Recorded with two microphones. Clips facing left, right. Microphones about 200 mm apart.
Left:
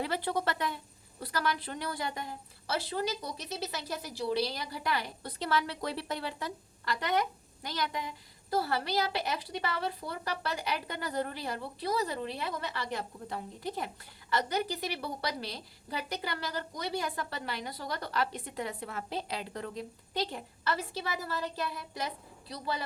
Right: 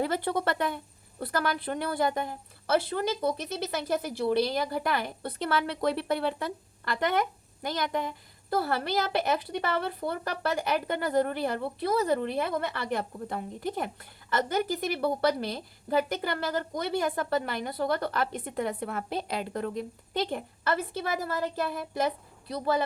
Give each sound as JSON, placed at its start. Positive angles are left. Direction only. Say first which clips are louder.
{"t": 0.0, "sound": "a woman's voice", "louder": "right 4 dB", "side_deg": -50}